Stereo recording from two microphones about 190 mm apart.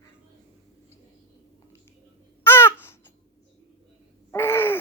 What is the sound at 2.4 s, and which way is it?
Babbling, 10° left (ahead or behind).